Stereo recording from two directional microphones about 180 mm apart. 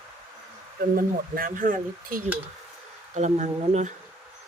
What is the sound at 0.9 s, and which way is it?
Speech, 50° right (ahead or behind).